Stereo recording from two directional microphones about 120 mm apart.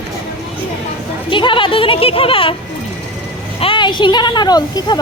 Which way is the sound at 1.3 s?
45° left (ahead or behind).